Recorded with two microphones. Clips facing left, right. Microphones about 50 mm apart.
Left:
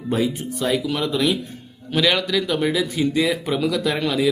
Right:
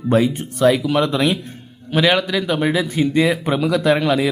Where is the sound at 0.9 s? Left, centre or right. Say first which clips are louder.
Right 4 dB; right.